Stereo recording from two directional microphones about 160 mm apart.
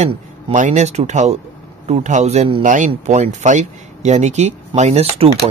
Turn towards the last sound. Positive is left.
turn(degrees=-40)  # may be behind; listen again after turning